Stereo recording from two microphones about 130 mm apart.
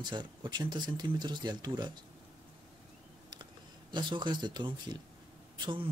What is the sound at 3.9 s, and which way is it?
Speech, 35° right (ahead or behind).